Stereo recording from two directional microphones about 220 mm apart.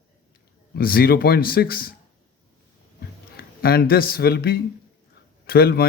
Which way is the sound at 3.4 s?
45° left (ahead or behind).